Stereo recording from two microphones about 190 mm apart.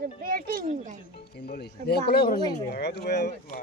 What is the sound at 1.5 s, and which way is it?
Speech, 55° left (ahead or behind).